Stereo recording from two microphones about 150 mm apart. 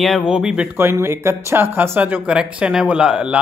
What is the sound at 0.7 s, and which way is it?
Speech, 15° right (ahead or behind).